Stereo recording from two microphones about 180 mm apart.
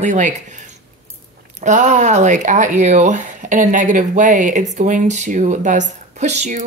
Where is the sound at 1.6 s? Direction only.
40° right (ahead or behind).